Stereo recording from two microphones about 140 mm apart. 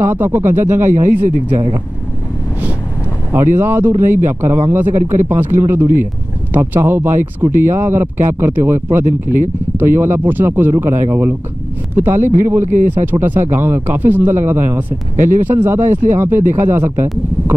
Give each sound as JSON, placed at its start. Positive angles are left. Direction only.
{"t": 0.0, "sound": "speech", "side_deg": -15}
{"t": 3.3, "sound": "speech", "side_deg": -15}